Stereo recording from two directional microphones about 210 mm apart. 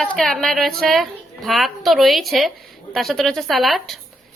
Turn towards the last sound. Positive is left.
turn(degrees=0)  # may be behind; listen again after turning